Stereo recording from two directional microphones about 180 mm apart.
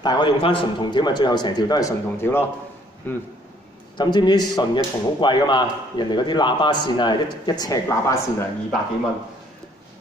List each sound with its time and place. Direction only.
0.0 s speech: 25° left (ahead or behind)
4.0 s speech: 25° left (ahead or behind)